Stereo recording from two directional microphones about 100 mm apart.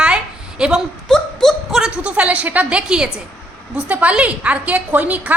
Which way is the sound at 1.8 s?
10° right (ahead or behind).